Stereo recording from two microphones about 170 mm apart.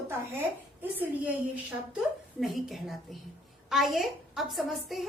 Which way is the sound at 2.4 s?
Centre (ahead or behind).